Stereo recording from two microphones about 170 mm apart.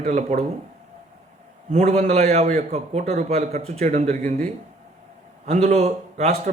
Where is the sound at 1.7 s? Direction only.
40° right (ahead or behind).